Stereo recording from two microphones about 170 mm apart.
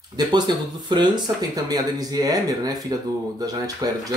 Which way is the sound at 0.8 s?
25° right (ahead or behind).